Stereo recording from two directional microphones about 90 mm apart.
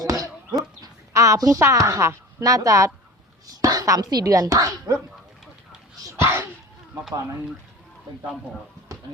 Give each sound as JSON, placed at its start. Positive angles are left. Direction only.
{"t": 0.0, "sound": "a sound", "side_deg": -40}
{"t": 0.8, "sound": "a woman's voice", "side_deg": -35}
{"t": 6.0, "sound": "speech", "side_deg": -35}